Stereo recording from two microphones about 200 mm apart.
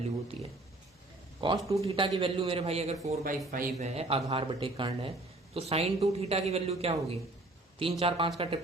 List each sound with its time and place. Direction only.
0.3 s speech: 30° right (ahead or behind)